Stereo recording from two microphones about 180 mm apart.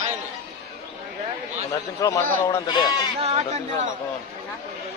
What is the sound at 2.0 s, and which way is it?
Speech, 15° left (ahead or behind).